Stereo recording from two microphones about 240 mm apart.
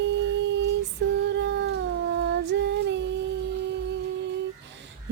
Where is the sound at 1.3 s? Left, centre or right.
Right.